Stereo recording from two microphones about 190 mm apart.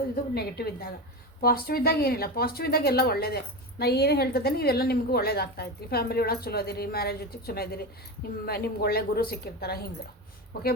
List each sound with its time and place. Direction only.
0.3 s speech: 55° left (ahead or behind)